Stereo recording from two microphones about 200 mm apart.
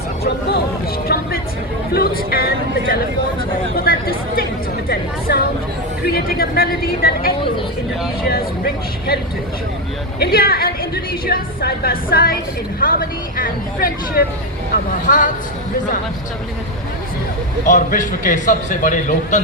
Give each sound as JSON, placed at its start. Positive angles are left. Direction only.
{"t": 1.0, "sound": "a woman's voice", "side_deg": 50}
{"t": 3.8, "sound": "a woman's voice", "side_deg": 50}
{"t": 10.2, "sound": "a woman's voice", "side_deg": 50}
{"t": 17.7, "sound": "a man's voice", "side_deg": 40}